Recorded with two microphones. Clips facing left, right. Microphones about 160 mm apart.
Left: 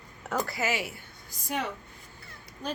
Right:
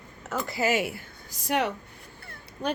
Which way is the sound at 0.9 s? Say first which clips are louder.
Right 6 dB; 75° right (ahead or behind).